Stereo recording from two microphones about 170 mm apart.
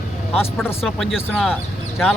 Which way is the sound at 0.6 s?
10° left (ahead or behind).